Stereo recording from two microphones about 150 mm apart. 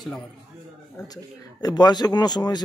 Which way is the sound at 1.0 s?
25° left (ahead or behind).